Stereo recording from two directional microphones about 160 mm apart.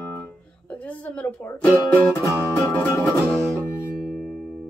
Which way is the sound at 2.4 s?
10° left (ahead or behind).